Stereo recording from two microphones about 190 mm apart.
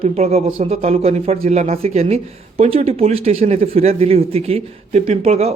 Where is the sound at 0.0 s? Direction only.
35° right (ahead or behind).